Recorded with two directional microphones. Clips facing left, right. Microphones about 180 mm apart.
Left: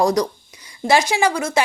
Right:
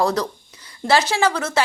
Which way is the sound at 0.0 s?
15° left (ahead or behind).